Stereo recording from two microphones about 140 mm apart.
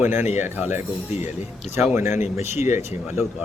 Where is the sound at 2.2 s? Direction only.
55° left (ahead or behind).